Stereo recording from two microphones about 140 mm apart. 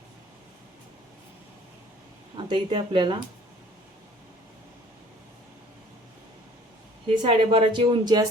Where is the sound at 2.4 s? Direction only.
35° right (ahead or behind).